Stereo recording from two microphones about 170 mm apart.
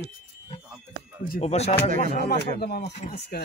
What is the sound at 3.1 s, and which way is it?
Speech, 65° left (ahead or behind).